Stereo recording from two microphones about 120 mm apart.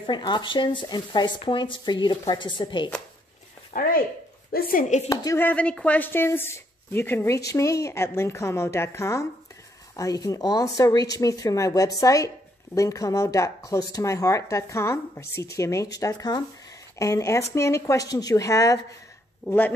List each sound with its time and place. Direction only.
0.0 s speech: 40° left (ahead or behind)
3.7 s speech: 90° left
4.8 s a woman's voice: 75° left (ahead or behind)
5.1 s speech: 25° left (ahead or behind)
5.4 s speech: 10° left (ahead or behind); by 18.8 s 30° left (ahead or behind)
19.4 s speech: 15° left (ahead or behind)